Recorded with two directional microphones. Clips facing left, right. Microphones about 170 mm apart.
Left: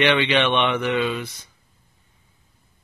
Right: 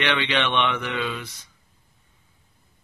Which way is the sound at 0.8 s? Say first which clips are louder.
Left 6 dB; 20° left (ahead or behind).